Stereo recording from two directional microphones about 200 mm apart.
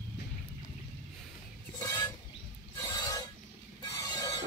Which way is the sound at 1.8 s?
15° left (ahead or behind).